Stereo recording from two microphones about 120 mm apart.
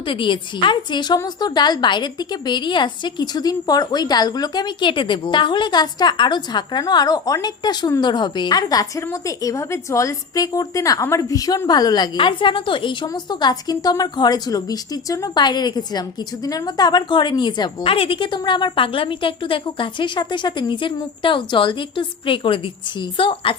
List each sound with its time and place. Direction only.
0.1 s a woman's voice: 45° left (ahead or behind)